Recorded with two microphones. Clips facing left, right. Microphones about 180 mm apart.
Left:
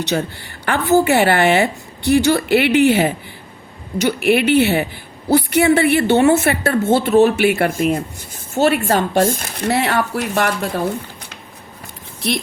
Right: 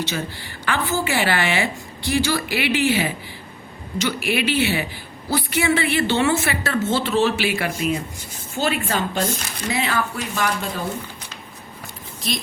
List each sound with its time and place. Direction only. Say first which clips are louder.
0.1 s a woman's voice: left 7 dB; 45° left (ahead or behind)
0.6 s a woman's voice: left 9 dB; 60° left (ahead or behind)
8.5 s a woman's voice: left 7 dB; 65° left (ahead or behind)
12.2 s a woman's voice: left 6 dB; 65° left (ahead or behind)